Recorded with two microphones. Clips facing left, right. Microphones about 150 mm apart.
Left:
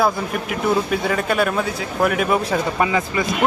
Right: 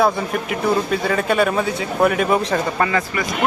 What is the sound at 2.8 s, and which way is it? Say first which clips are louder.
Speech: left 1 dB; 15° left (ahead or behind).